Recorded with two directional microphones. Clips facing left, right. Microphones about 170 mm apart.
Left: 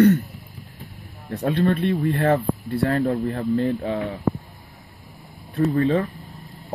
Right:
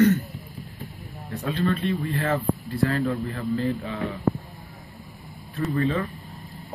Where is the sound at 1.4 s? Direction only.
55° left (ahead or behind).